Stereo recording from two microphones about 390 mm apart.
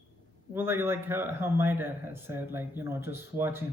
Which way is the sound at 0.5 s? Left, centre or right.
Centre.